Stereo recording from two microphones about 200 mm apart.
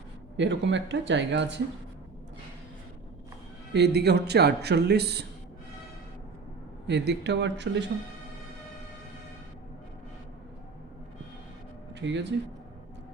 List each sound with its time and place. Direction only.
0.3 s speech: 65° right (ahead or behind)
3.7 s speech: 55° right (ahead or behind)
6.8 s speech: 60° right (ahead or behind)
11.9 s speech: 60° right (ahead or behind)